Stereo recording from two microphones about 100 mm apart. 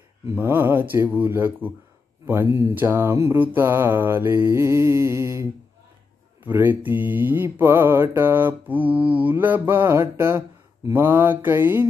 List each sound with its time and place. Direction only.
0.4 s mantra: 20° right (ahead or behind)